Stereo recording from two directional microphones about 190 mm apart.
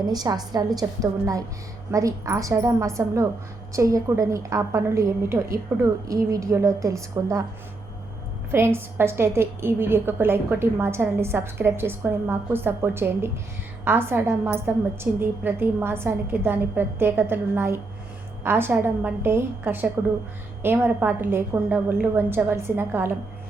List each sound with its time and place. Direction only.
0.1 s a woman's voice: 20° right (ahead or behind)
8.5 s a woman's voice: 15° right (ahead or behind)